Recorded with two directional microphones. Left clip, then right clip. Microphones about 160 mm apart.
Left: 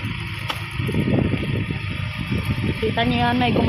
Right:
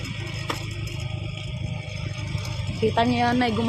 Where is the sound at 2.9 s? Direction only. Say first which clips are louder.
Left 1 dB; 20° left (ahead or behind).